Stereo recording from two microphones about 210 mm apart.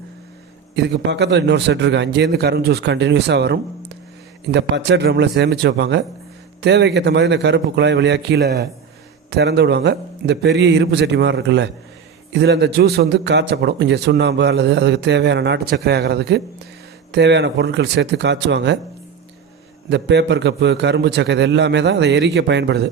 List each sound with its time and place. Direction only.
0.8 s a man's voice: 55° right (ahead or behind)
19.9 s a man's voice: 55° right (ahead or behind)